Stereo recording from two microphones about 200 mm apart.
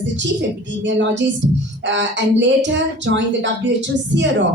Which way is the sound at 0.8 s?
65° right (ahead or behind).